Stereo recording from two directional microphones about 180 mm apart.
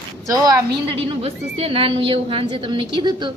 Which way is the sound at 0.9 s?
35° right (ahead or behind).